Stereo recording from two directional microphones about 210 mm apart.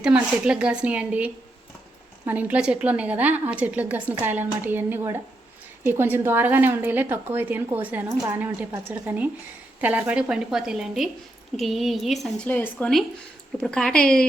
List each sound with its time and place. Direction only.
0.0 s a woman's voice: 5° right (ahead or behind)